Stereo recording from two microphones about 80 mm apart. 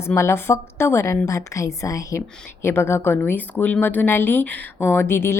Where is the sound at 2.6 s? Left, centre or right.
Left.